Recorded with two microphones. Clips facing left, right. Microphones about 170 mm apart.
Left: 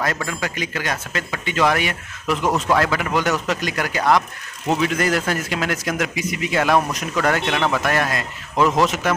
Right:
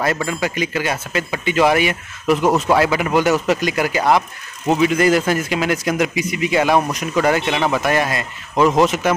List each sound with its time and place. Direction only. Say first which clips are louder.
0.0 s a man's voice: right 4 dB; 10° right (ahead or behind)